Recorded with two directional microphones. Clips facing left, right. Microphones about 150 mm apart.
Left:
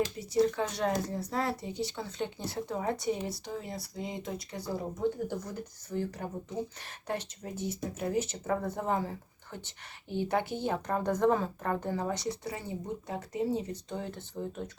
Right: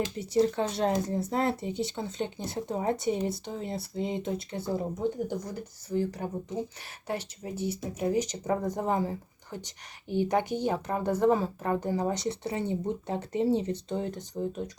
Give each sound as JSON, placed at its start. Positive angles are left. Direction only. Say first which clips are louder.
{"t": 0.3, "sound": "speech", "louder": "right 2 dB", "side_deg": -30}